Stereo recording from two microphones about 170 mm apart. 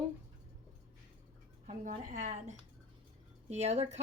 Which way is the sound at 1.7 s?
45° right (ahead or behind).